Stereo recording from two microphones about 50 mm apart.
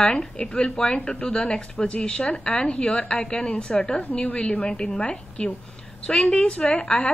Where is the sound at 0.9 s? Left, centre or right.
Left.